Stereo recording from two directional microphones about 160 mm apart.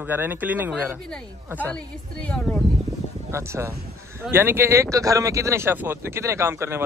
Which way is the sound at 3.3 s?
15° right (ahead or behind).